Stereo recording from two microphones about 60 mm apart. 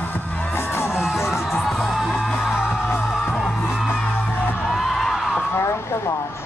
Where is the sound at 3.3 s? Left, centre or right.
Centre.